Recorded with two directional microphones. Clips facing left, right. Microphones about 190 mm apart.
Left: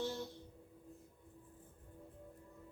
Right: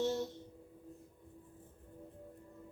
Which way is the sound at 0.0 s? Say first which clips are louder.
Right 6 dB; 20° right (ahead or behind).